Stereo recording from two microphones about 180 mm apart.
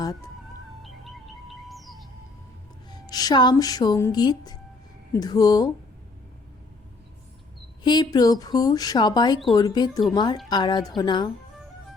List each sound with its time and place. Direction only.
0.8 s music: centre (ahead or behind)
2.9 s speech: 20° left (ahead or behind)
7.9 s speech: 20° left (ahead or behind)